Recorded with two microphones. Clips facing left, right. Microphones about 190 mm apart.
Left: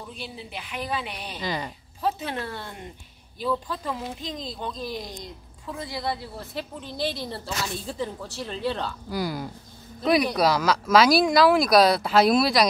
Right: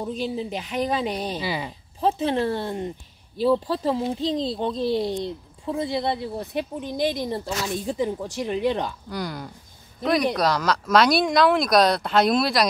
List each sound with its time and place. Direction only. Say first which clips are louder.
0.0 s a woman's voice: right 11 dB; 40° right (ahead or behind)
1.4 s speech: right 2 dB; 10° right (ahead or behind)
2.0 s a woman's voice: right 6 dB; 30° right (ahead or behind)
9.1 s speech: left 2 dB; 5° left (ahead or behind)